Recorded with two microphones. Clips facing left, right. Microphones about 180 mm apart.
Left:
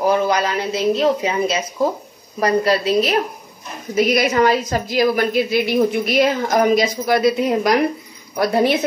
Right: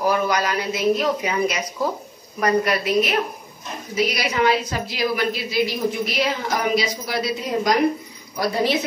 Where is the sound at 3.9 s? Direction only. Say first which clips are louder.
Left 7 dB; 50° left (ahead or behind).